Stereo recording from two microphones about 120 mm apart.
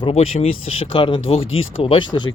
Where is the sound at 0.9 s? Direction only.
40° left (ahead or behind).